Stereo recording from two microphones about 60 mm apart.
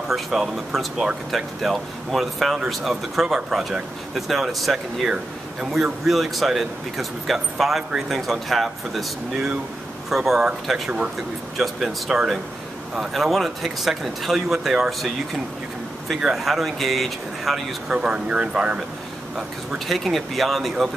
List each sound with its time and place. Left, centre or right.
0.1 s speech: centre
16.2 s speech: centre
17.9 s speech: centre
19.9 s speech: centre